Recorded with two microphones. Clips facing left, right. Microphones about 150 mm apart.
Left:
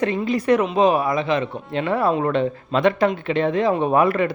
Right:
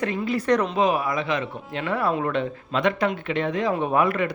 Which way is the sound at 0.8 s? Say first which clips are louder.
Left 4 dB; 30° left (ahead or behind).